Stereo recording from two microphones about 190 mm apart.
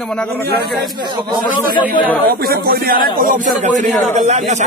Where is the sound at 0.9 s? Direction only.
25° right (ahead or behind).